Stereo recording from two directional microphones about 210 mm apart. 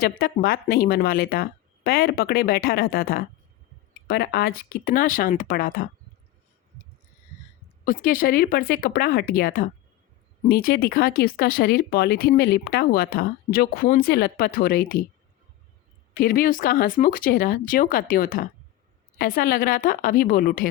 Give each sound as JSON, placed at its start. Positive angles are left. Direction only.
{"t": 0.0, "sound": "speech", "side_deg": 45}
{"t": 7.9, "sound": "speech", "side_deg": 40}
{"t": 16.1, "sound": "speech", "side_deg": 40}